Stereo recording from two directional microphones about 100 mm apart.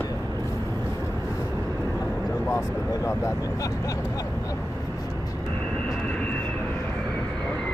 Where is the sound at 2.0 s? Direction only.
Centre (ahead or behind).